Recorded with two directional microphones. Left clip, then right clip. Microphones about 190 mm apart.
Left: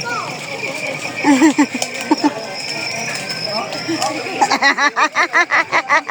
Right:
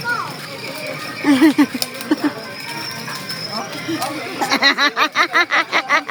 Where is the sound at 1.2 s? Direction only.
5° right (ahead or behind).